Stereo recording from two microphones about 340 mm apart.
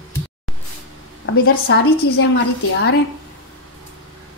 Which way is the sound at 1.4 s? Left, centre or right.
Left.